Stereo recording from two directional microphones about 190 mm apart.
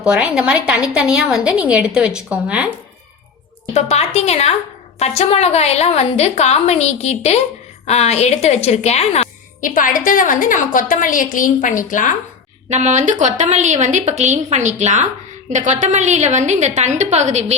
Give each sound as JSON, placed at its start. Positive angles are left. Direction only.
{"t": 0.0, "sound": "a woman's voice", "side_deg": -5}
{"t": 3.8, "sound": "a woman's voice", "side_deg": 35}
{"t": 12.6, "sound": "a woman's voice", "side_deg": -35}